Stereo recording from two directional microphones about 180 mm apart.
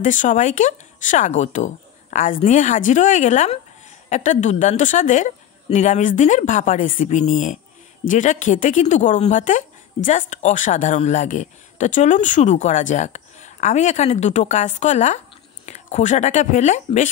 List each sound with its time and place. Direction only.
0.0 s a woman's voice: 45° left (ahead or behind)